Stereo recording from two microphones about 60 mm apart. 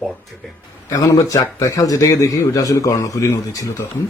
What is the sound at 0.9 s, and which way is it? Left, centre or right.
A man's voice, left.